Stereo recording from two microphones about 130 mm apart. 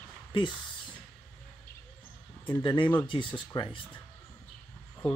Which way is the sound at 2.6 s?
40° left (ahead or behind).